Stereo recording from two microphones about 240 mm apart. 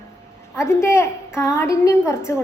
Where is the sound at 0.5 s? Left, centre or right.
Centre.